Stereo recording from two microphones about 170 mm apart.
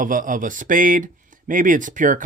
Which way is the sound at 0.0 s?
55° right (ahead or behind).